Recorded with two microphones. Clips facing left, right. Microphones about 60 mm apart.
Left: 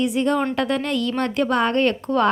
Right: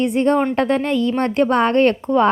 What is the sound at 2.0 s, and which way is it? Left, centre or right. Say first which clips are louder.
Speech: right 4 dB; centre.